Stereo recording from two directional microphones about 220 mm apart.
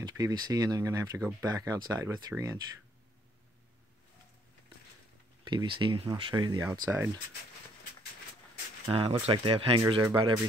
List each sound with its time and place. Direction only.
0.0 s speech: 15° right (ahead or behind)
5.4 s speech: 20° right (ahead or behind)
8.9 s speech: 25° right (ahead or behind)